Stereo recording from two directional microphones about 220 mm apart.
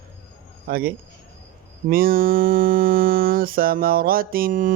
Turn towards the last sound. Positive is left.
turn(degrees=-40)  # may be behind; listen again after turning